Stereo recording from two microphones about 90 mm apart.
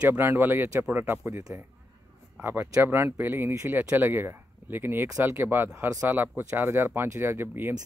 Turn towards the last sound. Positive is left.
turn(degrees=-25)  # may be behind; listen again after turning